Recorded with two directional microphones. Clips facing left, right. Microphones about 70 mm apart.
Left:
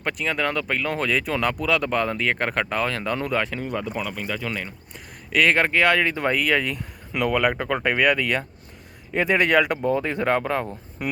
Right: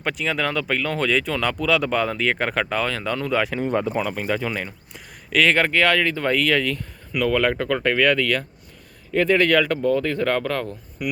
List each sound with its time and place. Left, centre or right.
0.0 s speech: centre
3.4 s speech: centre
3.7 s speech: right
4.4 s speech: centre; by 11.1 s left